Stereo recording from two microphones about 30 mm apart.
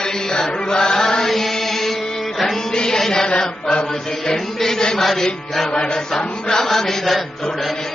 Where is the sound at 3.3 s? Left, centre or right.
Left.